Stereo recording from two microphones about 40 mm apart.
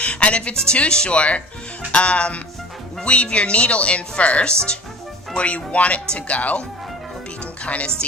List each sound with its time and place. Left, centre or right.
0.0 s music: left
0.7 s speech: left
7.6 s speech: left